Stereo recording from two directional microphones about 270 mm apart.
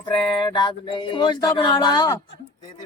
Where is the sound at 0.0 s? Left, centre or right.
Centre.